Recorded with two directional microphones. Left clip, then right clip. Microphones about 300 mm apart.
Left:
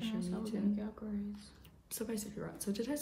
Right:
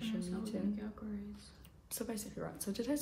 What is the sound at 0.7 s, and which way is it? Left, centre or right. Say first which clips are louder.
Speech: left 3 dB; centre.